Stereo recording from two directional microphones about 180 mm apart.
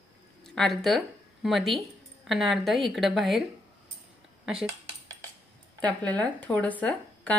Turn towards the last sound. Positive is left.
turn(degrees=10)  # may be behind; listen again after turning